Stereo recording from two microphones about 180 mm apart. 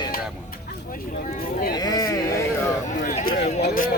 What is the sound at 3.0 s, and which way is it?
Speech, 50° left (ahead or behind).